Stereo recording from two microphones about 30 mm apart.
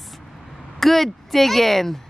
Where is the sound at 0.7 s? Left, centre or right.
Centre.